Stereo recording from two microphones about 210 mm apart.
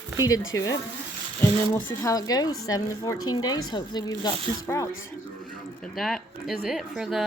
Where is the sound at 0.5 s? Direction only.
65° left (ahead or behind).